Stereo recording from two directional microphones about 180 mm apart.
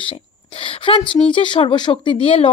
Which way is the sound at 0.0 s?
30° left (ahead or behind).